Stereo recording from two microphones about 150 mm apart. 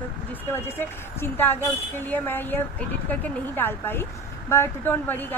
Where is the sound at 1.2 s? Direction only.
15° left (ahead or behind).